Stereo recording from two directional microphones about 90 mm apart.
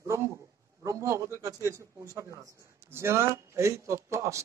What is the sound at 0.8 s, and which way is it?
Speech, 35° right (ahead or behind).